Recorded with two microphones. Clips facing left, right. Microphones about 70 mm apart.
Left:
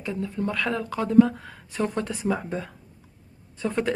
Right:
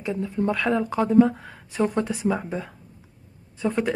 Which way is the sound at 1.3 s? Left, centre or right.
Centre.